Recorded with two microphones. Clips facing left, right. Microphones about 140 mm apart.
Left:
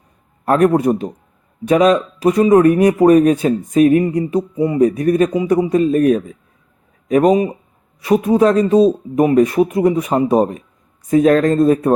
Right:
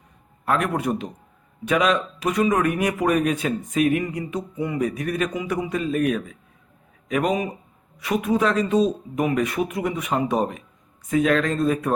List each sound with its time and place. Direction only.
0.4 s speech: 40° left (ahead or behind)